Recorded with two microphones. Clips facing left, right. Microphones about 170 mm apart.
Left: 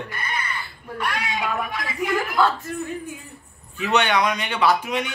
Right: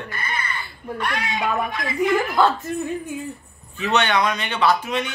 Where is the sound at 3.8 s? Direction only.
10° left (ahead or behind).